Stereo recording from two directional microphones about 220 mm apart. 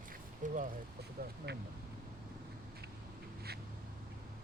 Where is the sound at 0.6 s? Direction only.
50° right (ahead or behind).